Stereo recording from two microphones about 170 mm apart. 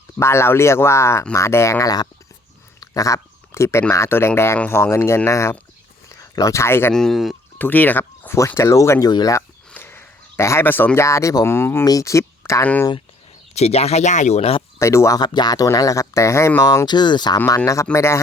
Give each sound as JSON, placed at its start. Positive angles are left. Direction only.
{"t": 0.2, "sound": "speech", "side_deg": 15}
{"t": 6.9, "sound": "speech", "side_deg": 0}
{"t": 9.6, "sound": "speech", "side_deg": 10}
{"t": 13.5, "sound": "speech", "side_deg": 40}
{"t": 14.8, "sound": "speech", "side_deg": 15}